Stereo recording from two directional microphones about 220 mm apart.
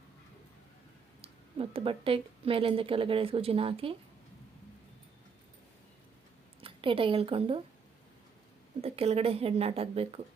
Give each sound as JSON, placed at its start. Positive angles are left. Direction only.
{"t": 1.2, "sound": "speech", "side_deg": -25}
{"t": 6.6, "sound": "a woman's voice", "side_deg": -25}
{"t": 8.8, "sound": "speech", "side_deg": -25}